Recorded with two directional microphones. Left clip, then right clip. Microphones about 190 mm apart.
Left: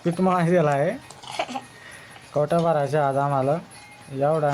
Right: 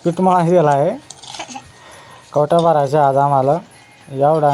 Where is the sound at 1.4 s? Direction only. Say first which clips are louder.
Left 4 dB; 50° left (ahead or behind).